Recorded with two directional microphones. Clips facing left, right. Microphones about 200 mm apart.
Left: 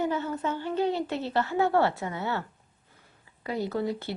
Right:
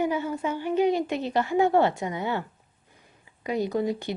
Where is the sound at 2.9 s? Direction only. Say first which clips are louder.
Right 3 dB; 15° right (ahead or behind).